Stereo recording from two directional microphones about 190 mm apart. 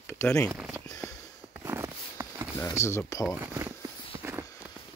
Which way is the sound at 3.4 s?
10° right (ahead or behind).